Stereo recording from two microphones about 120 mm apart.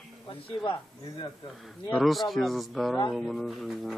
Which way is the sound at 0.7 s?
40° left (ahead or behind).